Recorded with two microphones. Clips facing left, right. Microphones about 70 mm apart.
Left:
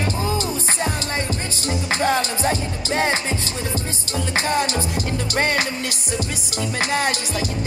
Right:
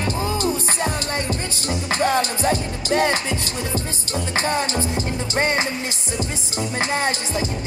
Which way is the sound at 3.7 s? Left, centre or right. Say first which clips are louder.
Right 1 dB; right.